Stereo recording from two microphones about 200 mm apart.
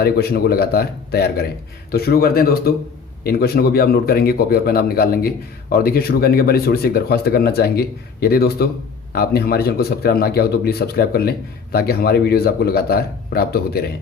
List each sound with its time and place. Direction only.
0.0 s a man's voice: 50° left (ahead or behind)